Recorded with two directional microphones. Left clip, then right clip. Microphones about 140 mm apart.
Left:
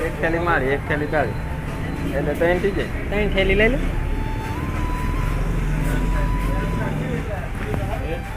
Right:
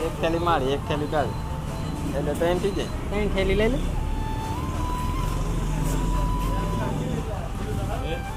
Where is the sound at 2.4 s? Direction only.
10° left (ahead or behind).